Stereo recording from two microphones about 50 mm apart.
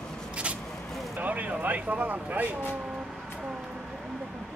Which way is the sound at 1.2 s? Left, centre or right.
Right.